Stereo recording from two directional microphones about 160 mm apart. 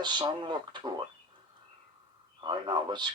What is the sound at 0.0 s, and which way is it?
Speech, 30° right (ahead or behind).